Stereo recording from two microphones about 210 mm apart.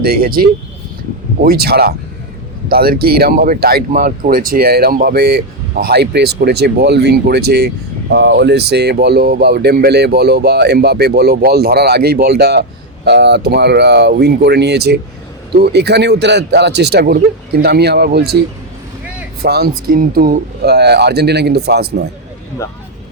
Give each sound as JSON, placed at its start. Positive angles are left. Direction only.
{"t": 0.0, "sound": "speech", "side_deg": -45}
{"t": 19.4, "sound": "speech", "side_deg": -50}